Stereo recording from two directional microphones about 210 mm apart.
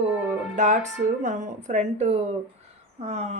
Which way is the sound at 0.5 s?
35° right (ahead or behind).